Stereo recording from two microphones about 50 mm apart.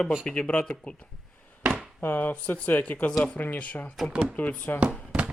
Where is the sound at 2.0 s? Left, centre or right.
Left.